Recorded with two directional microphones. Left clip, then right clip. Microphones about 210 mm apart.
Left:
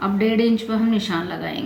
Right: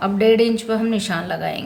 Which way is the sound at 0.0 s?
65° right (ahead or behind).